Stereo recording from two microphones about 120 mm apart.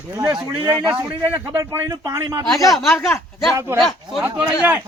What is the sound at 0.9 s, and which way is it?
A man's voice, 25° right (ahead or behind).